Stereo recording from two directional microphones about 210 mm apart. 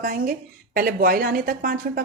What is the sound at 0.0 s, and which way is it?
A woman's voice, 45° right (ahead or behind).